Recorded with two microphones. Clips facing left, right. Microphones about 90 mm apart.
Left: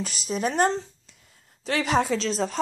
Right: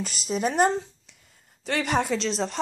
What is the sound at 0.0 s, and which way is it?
Speech, centre (ahead or behind).